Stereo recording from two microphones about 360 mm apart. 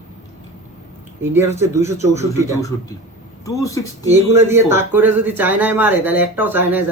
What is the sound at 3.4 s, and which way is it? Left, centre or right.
Speech, centre.